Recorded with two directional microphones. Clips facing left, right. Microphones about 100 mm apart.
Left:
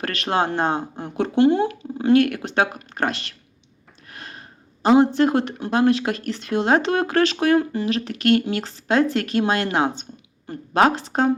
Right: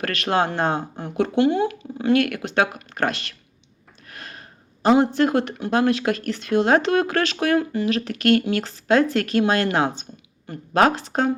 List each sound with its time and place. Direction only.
0.0 s speech: 30° left (ahead or behind)